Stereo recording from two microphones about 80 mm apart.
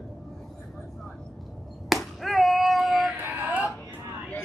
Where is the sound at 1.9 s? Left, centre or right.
Centre.